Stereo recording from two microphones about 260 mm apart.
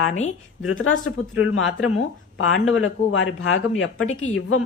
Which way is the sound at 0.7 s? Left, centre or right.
Left.